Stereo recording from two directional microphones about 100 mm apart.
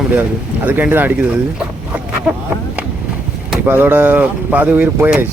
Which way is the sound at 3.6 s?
20° right (ahead or behind).